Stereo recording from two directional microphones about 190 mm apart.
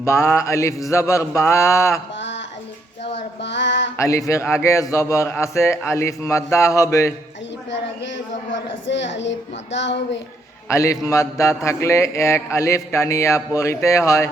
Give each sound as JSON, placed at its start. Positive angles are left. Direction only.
{"t": 0.0, "sound": "mantra", "side_deg": 15}
{"t": 3.4, "sound": "a sound", "side_deg": 70}
{"t": 3.9, "sound": "mantra", "side_deg": 15}
{"t": 8.9, "sound": "a woman's voice", "side_deg": 70}
{"t": 10.7, "sound": "mantra", "side_deg": 15}